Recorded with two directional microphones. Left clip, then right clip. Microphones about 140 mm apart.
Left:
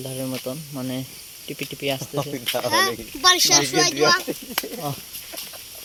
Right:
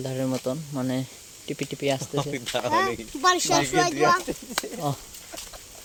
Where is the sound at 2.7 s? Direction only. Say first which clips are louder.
Left 3 dB; 60° right (ahead or behind).